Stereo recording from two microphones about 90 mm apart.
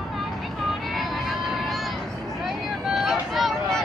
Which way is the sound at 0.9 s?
Centre (ahead or behind).